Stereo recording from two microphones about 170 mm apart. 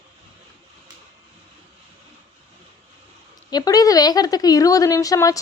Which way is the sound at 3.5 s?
25° left (ahead or behind).